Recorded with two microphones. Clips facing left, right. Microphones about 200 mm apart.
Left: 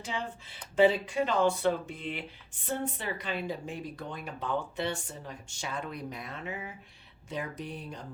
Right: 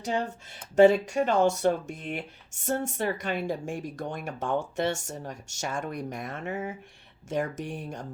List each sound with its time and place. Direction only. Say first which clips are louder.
0.0 s speech: right 7 dB; 40° right (ahead or behind)